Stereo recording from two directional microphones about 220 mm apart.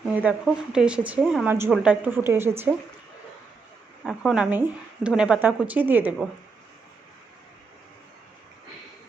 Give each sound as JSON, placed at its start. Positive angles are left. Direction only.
{"t": 0.2, "sound": "a woman's voice", "side_deg": -5}
{"t": 4.0, "sound": "a woman's voice", "side_deg": 0}